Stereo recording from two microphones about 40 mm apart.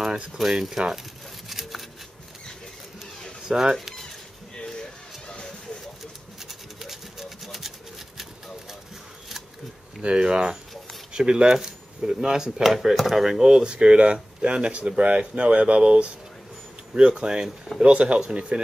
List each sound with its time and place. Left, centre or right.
0.0 s a sound: centre
0.7 s speech: centre
1.5 s a sound: centre
3.4 s speech: centre
6.8 s sewing machine: centre
10.0 s speech: right
13.6 s speech: right